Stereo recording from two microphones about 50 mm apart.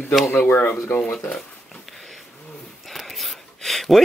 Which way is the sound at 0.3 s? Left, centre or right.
Left.